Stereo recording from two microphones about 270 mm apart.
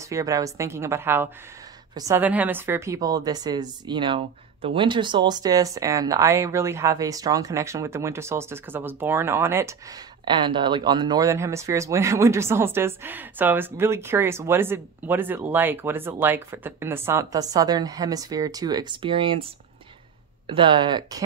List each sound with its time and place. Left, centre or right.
0.0 s a woman's voice: centre
20.4 s a woman's voice: centre